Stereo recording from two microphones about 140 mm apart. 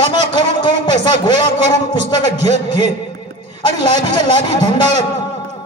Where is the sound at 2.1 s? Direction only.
55° right (ahead or behind).